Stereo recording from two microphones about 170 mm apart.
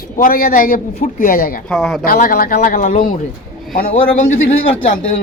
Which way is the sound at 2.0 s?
55° left (ahead or behind).